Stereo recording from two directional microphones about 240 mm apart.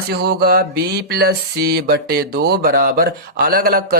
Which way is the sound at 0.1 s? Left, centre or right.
Right.